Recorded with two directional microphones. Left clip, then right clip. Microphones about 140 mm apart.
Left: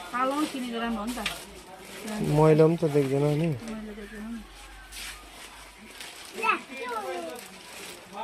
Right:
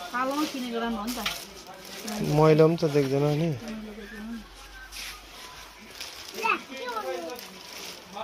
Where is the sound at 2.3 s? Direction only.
15° left (ahead or behind).